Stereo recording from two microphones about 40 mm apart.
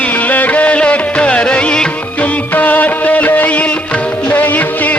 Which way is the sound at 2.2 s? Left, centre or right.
Left.